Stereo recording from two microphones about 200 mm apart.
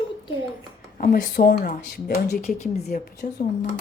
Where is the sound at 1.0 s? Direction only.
45° left (ahead or behind).